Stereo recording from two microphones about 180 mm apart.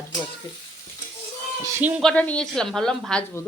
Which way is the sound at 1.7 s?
10° right (ahead or behind).